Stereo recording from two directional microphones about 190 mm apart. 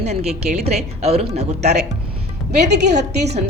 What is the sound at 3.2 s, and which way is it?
Speech, 35° right (ahead or behind).